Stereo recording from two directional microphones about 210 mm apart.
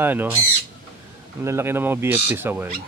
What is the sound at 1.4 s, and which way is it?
Speech, 10° right (ahead or behind).